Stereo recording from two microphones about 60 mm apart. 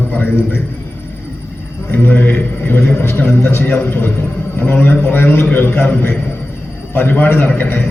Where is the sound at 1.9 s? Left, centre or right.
Left.